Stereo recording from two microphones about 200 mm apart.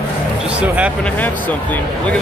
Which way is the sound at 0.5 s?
5° right (ahead or behind).